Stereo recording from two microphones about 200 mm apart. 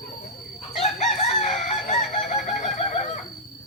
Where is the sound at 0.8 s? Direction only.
35° left (ahead or behind).